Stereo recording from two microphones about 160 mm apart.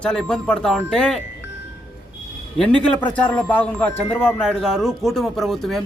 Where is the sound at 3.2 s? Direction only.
10° left (ahead or behind).